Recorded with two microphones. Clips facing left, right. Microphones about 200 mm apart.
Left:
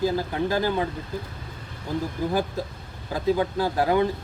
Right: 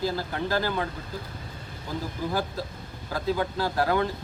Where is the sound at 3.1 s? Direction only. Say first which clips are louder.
Left 4 dB; 15° left (ahead or behind).